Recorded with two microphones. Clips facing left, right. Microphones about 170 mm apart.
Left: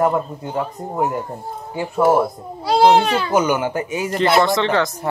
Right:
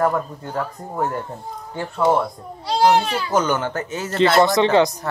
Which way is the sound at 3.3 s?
10° left (ahead or behind).